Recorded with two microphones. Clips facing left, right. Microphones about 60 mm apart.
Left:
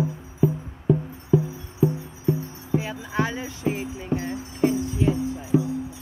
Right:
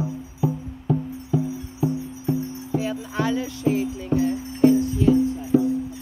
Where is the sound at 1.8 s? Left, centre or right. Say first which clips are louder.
Left 3 dB; left.